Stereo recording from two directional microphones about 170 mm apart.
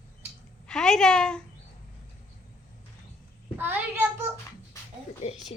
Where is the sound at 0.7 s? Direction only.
5° left (ahead or behind).